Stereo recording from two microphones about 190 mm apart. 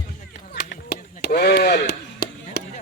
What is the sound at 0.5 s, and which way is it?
Chop, 60° left (ahead or behind).